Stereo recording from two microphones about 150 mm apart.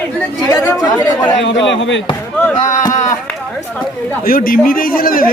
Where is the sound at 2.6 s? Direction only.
55° left (ahead or behind).